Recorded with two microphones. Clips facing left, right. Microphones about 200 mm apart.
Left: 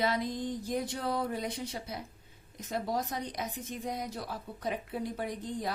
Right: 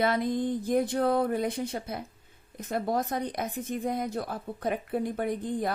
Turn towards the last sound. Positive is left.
turn(degrees=-55)  # may be behind; listen again after turning